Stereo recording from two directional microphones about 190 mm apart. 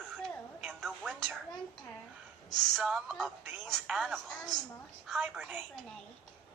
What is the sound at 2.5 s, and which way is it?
A woman's voice, centre (ahead or behind).